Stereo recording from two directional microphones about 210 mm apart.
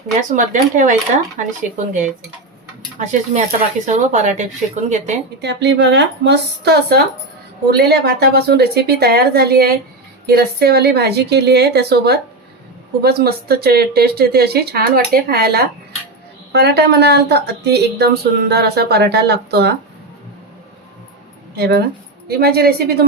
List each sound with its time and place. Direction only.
0.2 s a woman's voice: 35° right (ahead or behind)
5.4 s a woman's voice: 55° right (ahead or behind)
21.5 s a woman's voice: 50° right (ahead or behind)